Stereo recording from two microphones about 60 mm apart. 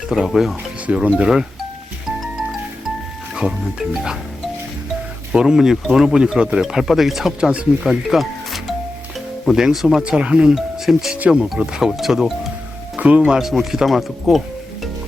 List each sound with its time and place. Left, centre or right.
0.3 s speech: centre
3.3 s speech: centre
5.3 s speech: centre
8.1 s music: centre
9.5 s speech: centre
10.0 s speech: centre
13.0 s speech: centre